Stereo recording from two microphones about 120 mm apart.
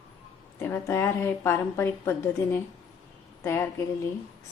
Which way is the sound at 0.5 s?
20° left (ahead or behind).